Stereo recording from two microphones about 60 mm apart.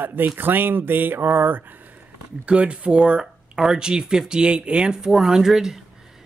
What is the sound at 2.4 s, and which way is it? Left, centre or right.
Speech, centre.